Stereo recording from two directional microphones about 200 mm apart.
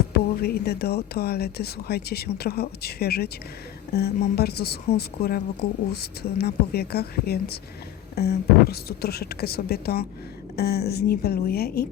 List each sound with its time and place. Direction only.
0.1 s speech: 50° left (ahead or behind)